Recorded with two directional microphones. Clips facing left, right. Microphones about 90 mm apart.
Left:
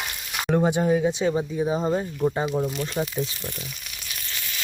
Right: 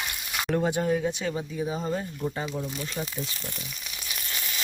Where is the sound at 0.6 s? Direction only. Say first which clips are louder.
Left 5 dB; 25° left (ahead or behind).